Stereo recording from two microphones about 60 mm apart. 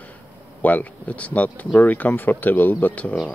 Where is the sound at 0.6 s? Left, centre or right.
Left.